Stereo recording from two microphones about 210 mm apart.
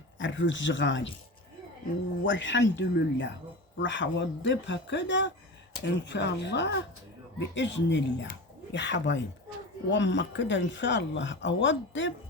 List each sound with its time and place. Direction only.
0.2 s speech: 60° left (ahead or behind)
2.2 s speech: 60° left (ahead or behind)